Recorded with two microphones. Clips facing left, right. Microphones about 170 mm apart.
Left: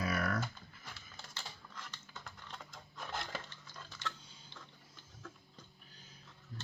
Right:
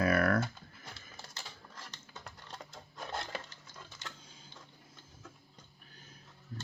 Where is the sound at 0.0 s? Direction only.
60° right (ahead or behind).